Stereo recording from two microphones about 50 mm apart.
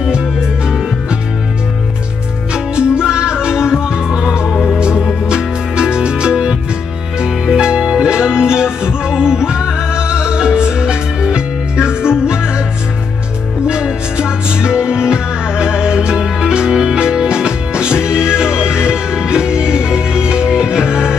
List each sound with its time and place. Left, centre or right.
2.5 s music: centre
4.7 s music: centre
7.6 s music: centre
13.7 s music: centre